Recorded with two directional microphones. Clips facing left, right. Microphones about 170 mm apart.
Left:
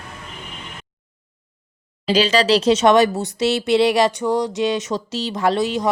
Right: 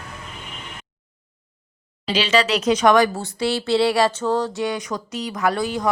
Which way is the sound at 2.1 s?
35° left (ahead or behind).